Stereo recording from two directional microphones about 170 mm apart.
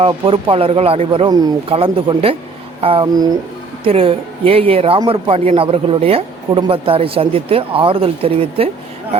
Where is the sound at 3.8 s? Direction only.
35° right (ahead or behind).